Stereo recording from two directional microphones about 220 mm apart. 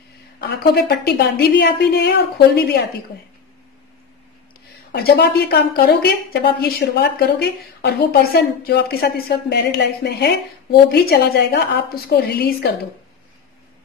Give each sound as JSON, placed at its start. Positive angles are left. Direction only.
{"t": 0.4, "sound": "a woman's voice", "side_deg": 50}
{"t": 4.9, "sound": "a woman's voice", "side_deg": 45}